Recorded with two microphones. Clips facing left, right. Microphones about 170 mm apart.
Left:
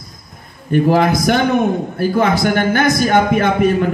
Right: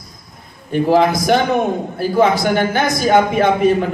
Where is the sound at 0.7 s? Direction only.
50° left (ahead or behind).